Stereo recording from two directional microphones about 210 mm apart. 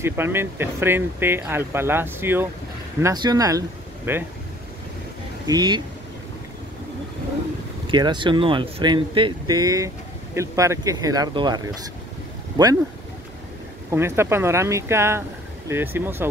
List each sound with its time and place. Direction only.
0.0 s speech: 10° right (ahead or behind)
5.5 s speech: 20° right (ahead or behind)
7.8 s speech: 20° right (ahead or behind)
13.8 s speech: 10° right (ahead or behind)